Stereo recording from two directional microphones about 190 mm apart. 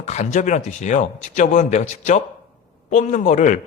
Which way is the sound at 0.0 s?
35° left (ahead or behind).